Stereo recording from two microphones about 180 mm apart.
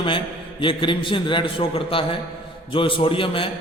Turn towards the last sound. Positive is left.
turn(degrees=30)  # may be behind; listen again after turning